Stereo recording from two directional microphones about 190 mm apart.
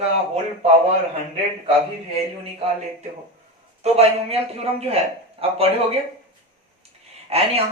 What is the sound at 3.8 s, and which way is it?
A man's voice, 30° right (ahead or behind).